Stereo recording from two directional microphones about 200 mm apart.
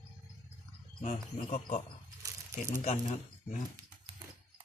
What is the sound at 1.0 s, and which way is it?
Speech, 40° left (ahead or behind).